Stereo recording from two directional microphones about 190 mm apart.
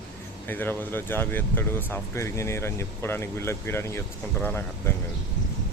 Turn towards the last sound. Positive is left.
turn(degrees=10)  # may be behind; listen again after turning